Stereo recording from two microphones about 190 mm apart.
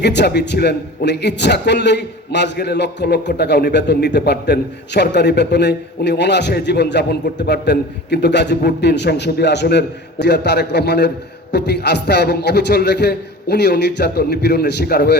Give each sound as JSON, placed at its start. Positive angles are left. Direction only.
{"t": 0.0, "sound": "a man's voice", "side_deg": 65}